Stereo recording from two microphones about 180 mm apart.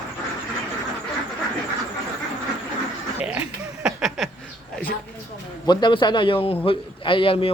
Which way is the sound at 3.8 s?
Centre (ahead or behind).